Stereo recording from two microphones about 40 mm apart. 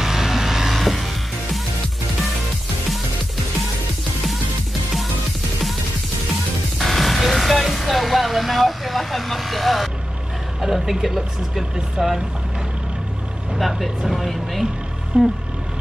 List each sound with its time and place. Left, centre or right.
0.0 s music: centre
6.8 s music: centre
10.6 s speech: centre
13.6 s speech: centre
15.1 s vehicle: centre